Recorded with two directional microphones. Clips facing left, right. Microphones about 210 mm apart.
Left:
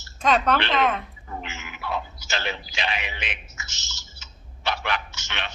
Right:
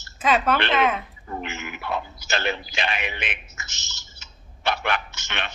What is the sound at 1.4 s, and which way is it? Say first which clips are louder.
Speech: right 4 dB; 55° right (ahead or behind).